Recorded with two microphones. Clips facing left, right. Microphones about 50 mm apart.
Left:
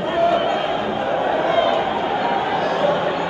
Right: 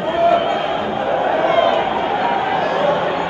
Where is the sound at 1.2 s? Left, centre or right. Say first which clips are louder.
Right 3 dB; right.